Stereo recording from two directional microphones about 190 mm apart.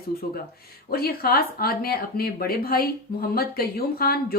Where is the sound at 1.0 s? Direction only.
55° left (ahead or behind).